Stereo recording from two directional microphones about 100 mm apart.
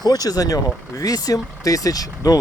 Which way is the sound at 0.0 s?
40° left (ahead or behind).